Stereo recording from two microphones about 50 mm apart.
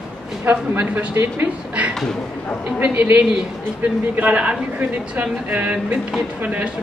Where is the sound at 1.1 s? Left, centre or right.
Right.